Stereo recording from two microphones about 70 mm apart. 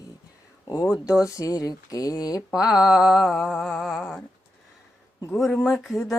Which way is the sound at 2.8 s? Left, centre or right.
Centre.